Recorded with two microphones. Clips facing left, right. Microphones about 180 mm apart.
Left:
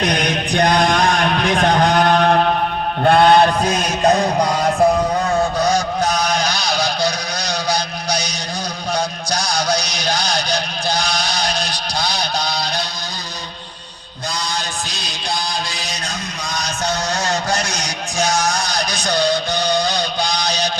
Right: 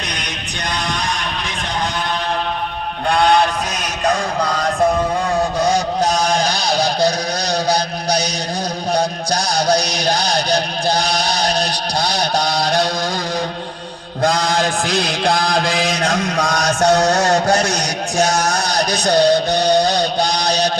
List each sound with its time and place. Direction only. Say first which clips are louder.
0.0 s a sound: left 9 dB; 50° left (ahead or behind)
3.0 s music: left 3 dB; 40° left (ahead or behind); by 4.9 s 10° left (ahead or behind)
9.0 s music: right 3 dB; 55° right (ahead or behind)
12.4 s a sound: right 6 dB; 90° right
14.2 s mantra: right 9 dB; 90° right; by 17.7 s 65° right (ahead or behind)
18.9 s music: right 6 dB; 65° right (ahead or behind)